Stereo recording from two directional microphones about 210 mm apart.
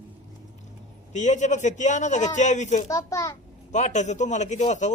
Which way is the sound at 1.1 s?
35° left (ahead or behind).